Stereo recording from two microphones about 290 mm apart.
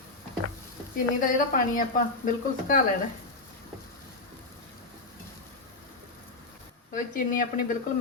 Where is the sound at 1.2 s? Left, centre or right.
Left.